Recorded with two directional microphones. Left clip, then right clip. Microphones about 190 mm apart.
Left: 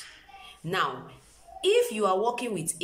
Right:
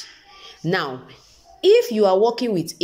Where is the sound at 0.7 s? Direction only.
35° right (ahead or behind).